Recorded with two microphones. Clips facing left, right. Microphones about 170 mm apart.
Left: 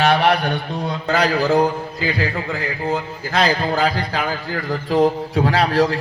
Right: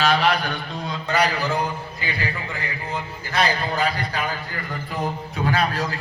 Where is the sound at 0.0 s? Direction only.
65° left (ahead or behind).